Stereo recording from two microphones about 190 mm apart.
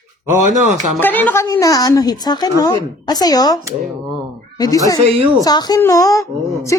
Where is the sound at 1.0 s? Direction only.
10° left (ahead or behind).